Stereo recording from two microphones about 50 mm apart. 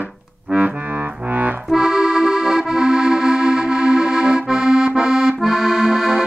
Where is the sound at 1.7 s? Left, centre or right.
Centre.